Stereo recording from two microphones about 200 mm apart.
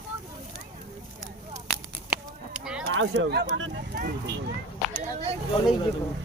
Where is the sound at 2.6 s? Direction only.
5° right (ahead or behind).